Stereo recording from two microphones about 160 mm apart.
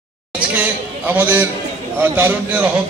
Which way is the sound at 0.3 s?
10° right (ahead or behind).